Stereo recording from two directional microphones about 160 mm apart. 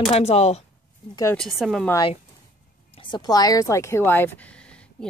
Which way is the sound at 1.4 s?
Centre (ahead or behind).